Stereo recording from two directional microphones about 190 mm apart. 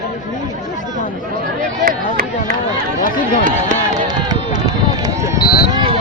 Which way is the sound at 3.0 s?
45° left (ahead or behind).